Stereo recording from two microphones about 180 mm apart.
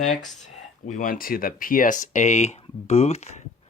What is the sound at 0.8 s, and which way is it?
Speech, 45° left (ahead or behind).